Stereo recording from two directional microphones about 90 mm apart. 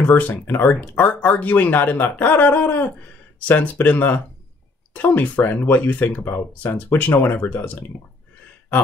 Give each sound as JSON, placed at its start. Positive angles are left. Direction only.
{"t": 0.0, "sound": "speech", "side_deg": 20}